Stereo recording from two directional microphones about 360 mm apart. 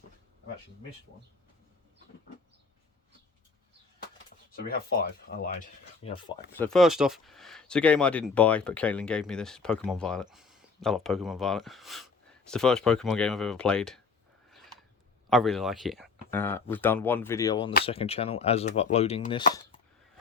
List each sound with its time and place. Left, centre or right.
4.3 s speech: left
6.5 s speech: centre
14.5 s a sound: centre
15.3 s speech: centre